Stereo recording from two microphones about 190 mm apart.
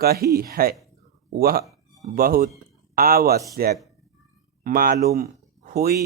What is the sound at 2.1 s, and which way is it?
Speech, 50° right (ahead or behind).